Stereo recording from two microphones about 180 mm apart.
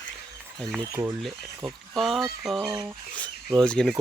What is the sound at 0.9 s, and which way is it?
Speech, 15° right (ahead or behind).